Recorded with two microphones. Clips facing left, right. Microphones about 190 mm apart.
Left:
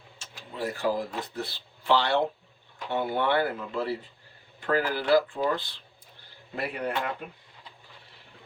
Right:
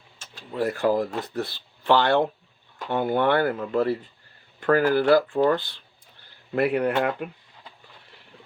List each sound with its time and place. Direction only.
0.6 s speech: 60° right (ahead or behind)